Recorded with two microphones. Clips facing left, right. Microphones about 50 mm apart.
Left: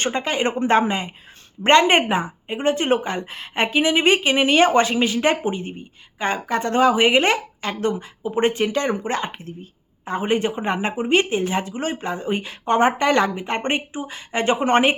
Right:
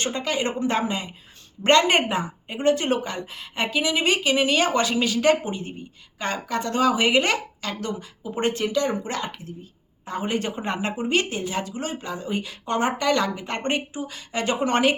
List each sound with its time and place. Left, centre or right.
0.0 s speech: left
8.6 s speech: left